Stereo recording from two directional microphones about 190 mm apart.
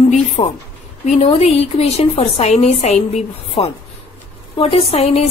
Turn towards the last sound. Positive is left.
turn(degrees=30)  # may be behind; listen again after turning